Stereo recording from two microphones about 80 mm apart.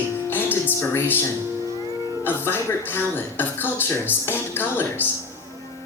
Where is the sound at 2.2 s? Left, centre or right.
Left.